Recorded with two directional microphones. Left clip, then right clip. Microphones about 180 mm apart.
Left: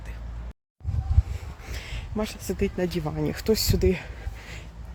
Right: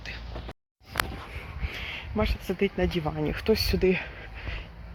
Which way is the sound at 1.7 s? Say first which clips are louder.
Right 2 dB; 20° left (ahead or behind).